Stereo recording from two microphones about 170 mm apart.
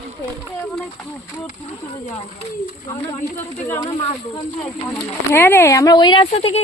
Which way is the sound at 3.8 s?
25° left (ahead or behind).